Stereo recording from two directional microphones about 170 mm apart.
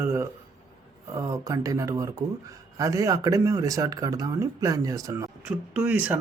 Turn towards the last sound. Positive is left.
turn(degrees=-10)  # may be behind; listen again after turning